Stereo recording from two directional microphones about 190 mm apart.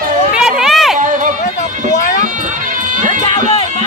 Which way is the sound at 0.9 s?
40° right (ahead or behind).